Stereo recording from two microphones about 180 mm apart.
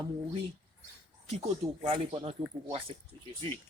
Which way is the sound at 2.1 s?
30° right (ahead or behind).